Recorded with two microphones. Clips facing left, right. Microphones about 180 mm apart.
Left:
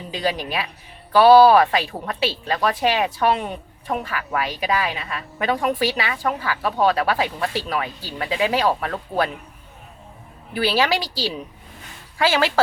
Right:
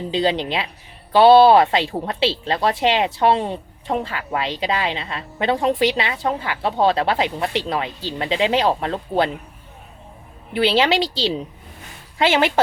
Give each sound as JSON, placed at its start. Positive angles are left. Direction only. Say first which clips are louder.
{"t": 0.1, "sound": "a woman's voice", "louder": "right 4 dB", "side_deg": -25}
{"t": 10.5, "sound": "a woman's voice", "louder": "right 3 dB", "side_deg": -25}